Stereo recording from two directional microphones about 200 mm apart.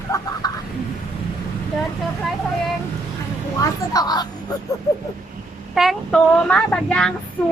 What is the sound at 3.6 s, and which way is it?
Speech, 20° left (ahead or behind).